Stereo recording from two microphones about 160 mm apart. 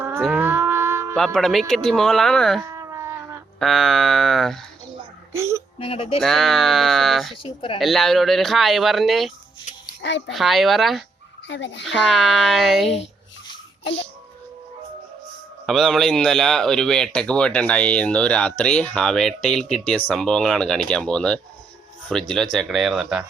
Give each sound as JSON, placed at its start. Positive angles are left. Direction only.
{"t": 0.3, "sound": "a sound", "side_deg": -10}
{"t": 1.1, "sound": "speech", "side_deg": 5}
{"t": 2.6, "sound": "a sound", "side_deg": -20}
{"t": 3.6, "sound": "speech", "side_deg": 0}
{"t": 5.3, "sound": "speech", "side_deg": -15}
{"t": 5.8, "sound": "speech", "side_deg": 35}
{"t": 6.2, "sound": "speech", "side_deg": 0}
{"t": 7.4, "sound": "speech", "side_deg": 35}
{"t": 7.8, "sound": "speech", "side_deg": 0}
{"t": 9.6, "sound": "music", "side_deg": 80}
{"t": 10.3, "sound": "speech", "side_deg": 0}
{"t": 11.4, "sound": "speech", "side_deg": 90}
{"t": 11.9, "sound": "speech", "side_deg": 0}
{"t": 15.6, "sound": "speech", "side_deg": 0}